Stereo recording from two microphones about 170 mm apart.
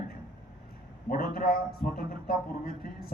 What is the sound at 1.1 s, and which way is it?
A man's voice, 60° left (ahead or behind).